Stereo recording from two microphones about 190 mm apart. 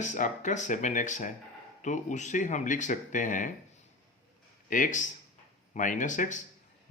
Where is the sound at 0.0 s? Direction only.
40° left (ahead or behind).